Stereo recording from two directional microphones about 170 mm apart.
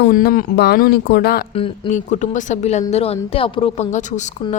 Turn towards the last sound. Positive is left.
turn(degrees=45)  # may be behind; listen again after turning